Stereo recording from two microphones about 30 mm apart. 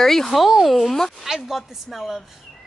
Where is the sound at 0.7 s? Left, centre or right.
Centre.